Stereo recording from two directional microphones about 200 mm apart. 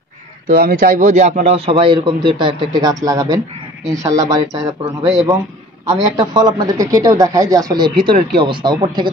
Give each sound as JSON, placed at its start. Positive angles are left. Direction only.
{"t": 0.5, "sound": "a man's voice", "side_deg": -45}